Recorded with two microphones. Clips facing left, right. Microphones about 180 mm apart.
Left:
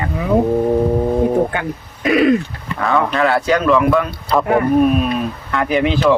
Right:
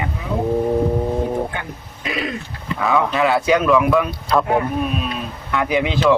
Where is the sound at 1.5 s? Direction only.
65° left (ahead or behind).